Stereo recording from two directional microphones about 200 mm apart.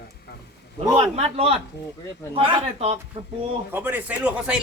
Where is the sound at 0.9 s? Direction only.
30° right (ahead or behind).